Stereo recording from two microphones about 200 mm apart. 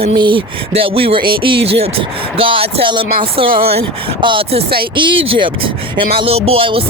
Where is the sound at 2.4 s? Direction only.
25° right (ahead or behind).